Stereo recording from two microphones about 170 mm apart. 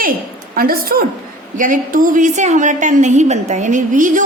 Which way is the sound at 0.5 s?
60° right (ahead or behind).